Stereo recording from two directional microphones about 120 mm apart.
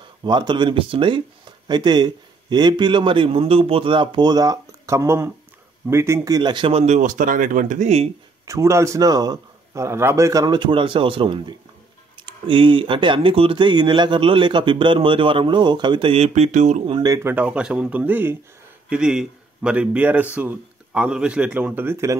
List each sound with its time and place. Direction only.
0.2 s speech: 40° right (ahead or behind)
6.7 s speech: 70° right (ahead or behind)
8.5 s a man's voice: 25° right (ahead or behind)
9.8 s speech: 20° right (ahead or behind); by 16.8 s 85° right
17.2 s speech: 15° right (ahead or behind)